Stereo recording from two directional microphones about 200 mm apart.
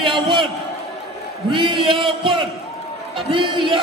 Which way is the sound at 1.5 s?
25° right (ahead or behind).